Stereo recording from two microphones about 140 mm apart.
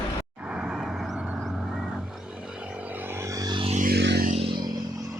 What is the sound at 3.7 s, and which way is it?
Music, 75° right (ahead or behind).